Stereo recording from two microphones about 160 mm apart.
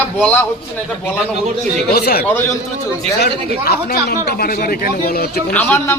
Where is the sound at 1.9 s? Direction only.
75° left (ahead or behind).